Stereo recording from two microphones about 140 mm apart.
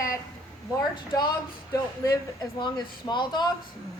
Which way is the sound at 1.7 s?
25° left (ahead or behind).